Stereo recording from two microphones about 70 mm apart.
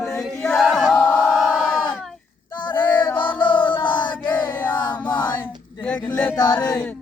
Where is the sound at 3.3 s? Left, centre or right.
Left.